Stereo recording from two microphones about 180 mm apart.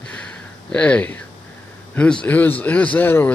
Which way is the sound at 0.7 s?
5° left (ahead or behind).